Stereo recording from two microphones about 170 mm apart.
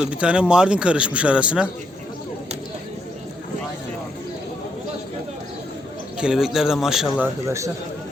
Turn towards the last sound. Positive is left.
turn(degrees=-15)  # may be behind; listen again after turning